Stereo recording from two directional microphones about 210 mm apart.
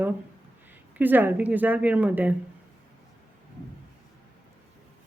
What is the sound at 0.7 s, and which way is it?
Speech, 10° right (ahead or behind).